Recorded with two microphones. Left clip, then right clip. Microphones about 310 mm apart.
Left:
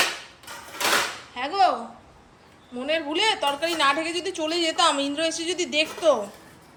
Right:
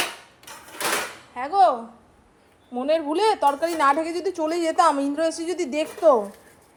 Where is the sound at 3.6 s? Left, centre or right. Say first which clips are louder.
Right 2 dB; right.